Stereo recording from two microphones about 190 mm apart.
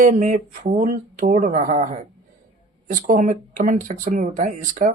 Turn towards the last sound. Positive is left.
turn(degrees=-40)  # may be behind; listen again after turning